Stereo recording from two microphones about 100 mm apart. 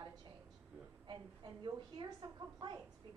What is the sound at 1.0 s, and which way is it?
A woman's voice, 50° right (ahead or behind).